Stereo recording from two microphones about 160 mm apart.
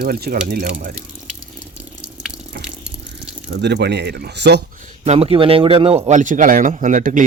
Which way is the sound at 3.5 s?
90° right.